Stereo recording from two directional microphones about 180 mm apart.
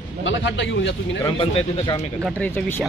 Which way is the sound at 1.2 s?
30° left (ahead or behind).